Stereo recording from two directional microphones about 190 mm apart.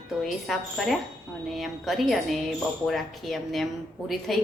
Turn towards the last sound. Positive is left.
turn(degrees=0)  # may be behind; listen again after turning